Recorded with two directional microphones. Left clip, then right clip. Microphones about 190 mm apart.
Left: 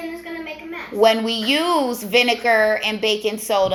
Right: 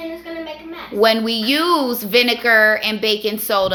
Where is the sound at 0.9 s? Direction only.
20° right (ahead or behind).